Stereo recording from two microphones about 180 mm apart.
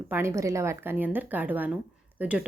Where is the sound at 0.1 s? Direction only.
15° right (ahead or behind).